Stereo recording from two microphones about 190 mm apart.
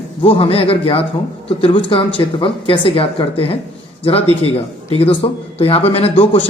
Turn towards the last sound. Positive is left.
turn(degrees=30)  # may be behind; listen again after turning